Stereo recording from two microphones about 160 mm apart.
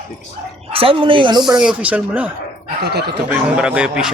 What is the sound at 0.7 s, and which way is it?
Speech, 35° right (ahead or behind).